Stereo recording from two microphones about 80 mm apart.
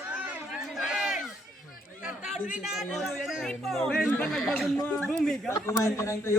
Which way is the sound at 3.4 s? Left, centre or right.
Centre.